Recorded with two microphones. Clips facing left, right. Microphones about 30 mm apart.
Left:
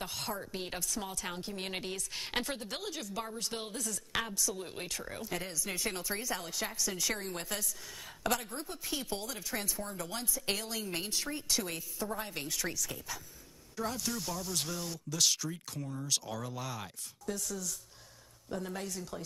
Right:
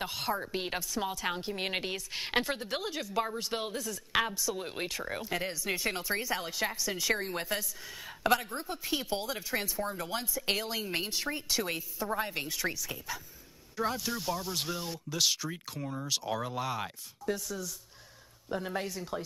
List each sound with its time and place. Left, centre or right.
0.0 s a woman's voice: centre
15.8 s a woman's voice: right
18.5 s a woman's voice: right